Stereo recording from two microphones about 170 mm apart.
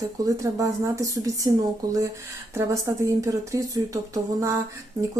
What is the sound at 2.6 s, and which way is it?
Speech, 20° right (ahead or behind).